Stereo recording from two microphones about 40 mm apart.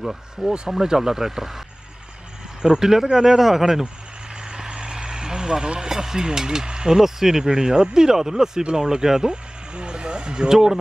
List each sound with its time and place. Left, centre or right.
0.0 s speech: centre
2.6 s speech: centre
4.4 s vehicle: right
5.9 s speech: centre